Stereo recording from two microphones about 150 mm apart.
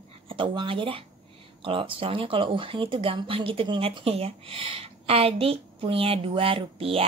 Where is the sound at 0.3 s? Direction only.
35° right (ahead or behind).